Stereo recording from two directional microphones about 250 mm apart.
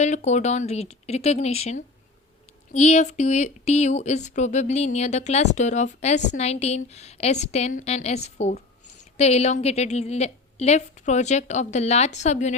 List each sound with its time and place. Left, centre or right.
0.0 s speech: left